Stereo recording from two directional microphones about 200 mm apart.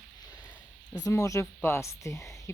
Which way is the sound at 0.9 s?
20° left (ahead or behind).